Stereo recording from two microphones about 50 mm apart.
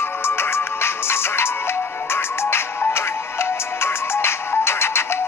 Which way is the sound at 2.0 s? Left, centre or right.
Left.